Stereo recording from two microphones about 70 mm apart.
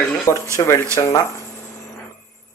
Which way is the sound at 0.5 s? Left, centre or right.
Left.